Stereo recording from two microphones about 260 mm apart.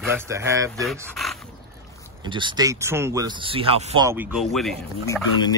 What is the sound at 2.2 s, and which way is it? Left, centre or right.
Speech, centre.